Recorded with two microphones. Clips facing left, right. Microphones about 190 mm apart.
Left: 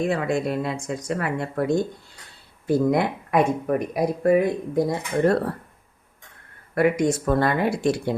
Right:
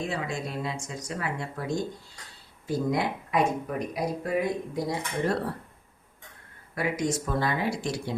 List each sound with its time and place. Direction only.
0.1 s speech: 60° left (ahead or behind)
6.7 s speech: 60° left (ahead or behind)